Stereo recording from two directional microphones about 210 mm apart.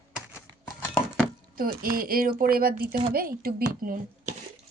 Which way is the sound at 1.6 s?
45° right (ahead or behind).